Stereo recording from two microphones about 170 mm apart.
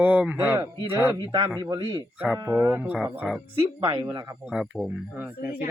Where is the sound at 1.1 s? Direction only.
25° right (ahead or behind); by 3.3 s 5° right (ahead or behind).